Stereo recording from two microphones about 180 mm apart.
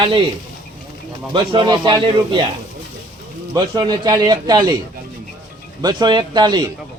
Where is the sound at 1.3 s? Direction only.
25° right (ahead or behind).